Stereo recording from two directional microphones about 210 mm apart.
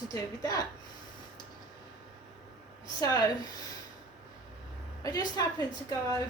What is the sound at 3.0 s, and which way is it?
Speech, 20° left (ahead or behind).